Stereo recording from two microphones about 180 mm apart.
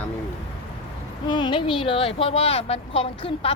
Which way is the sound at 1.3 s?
25° left (ahead or behind).